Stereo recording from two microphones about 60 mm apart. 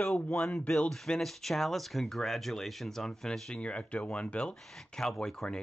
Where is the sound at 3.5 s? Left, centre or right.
Centre.